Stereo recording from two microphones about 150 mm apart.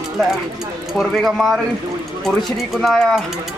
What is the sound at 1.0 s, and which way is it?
Speech, centre (ahead or behind).